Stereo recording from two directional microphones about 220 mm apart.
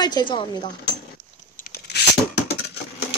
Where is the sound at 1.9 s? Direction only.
50° left (ahead or behind).